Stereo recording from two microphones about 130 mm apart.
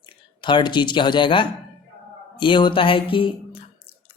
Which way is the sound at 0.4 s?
35° left (ahead or behind).